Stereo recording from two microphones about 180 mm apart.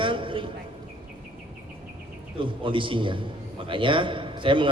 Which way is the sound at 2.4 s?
30° right (ahead or behind).